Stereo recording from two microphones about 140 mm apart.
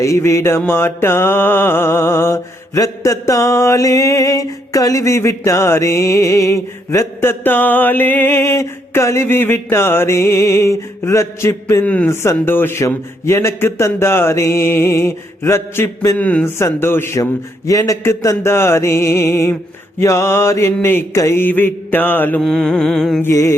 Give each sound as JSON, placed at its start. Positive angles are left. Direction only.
{"t": 0.0, "sound": "mantra", "side_deg": 20}
{"t": 11.9, "sound": "speech", "side_deg": 10}
{"t": 17.7, "sound": "mantra", "side_deg": 25}
{"t": 20.8, "sound": "speech", "side_deg": 15}
{"t": 22.4, "sound": "music", "side_deg": 5}
{"t": 23.2, "sound": "mantra", "side_deg": 20}